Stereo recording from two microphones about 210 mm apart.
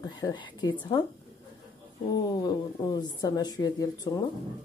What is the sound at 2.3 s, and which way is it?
Speech, 20° left (ahead or behind).